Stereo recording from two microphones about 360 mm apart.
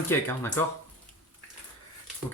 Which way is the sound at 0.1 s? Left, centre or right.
Centre.